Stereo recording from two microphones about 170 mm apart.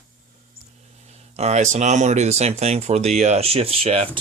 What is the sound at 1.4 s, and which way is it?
Speech, 40° right (ahead or behind).